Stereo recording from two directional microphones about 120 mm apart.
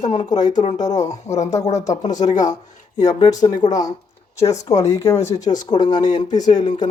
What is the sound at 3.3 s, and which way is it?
Speech, 30° left (ahead or behind).